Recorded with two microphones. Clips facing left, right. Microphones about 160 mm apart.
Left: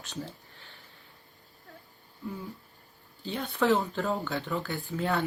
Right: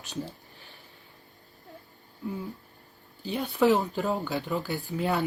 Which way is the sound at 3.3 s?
15° right (ahead or behind).